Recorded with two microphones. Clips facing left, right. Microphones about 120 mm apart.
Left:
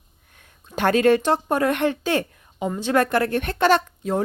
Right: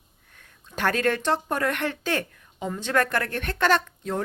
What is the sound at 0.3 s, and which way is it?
Speech, 20° left (ahead or behind).